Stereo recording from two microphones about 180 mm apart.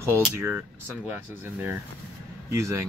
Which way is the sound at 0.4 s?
15° right (ahead or behind).